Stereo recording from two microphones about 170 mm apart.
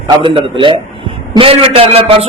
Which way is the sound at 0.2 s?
30° right (ahead or behind).